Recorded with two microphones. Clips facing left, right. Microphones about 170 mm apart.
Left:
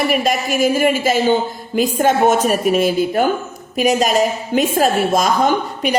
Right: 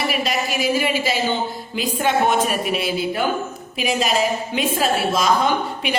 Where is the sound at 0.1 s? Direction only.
50° left (ahead or behind).